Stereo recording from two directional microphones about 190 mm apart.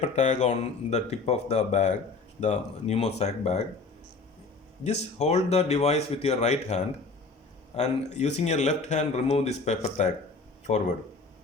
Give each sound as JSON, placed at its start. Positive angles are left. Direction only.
{"t": 0.0, "sound": "speech", "side_deg": 40}
{"t": 4.8, "sound": "speech", "side_deg": 35}